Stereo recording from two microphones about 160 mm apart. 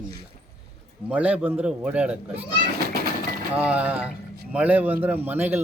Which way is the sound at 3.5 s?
10° right (ahead or behind).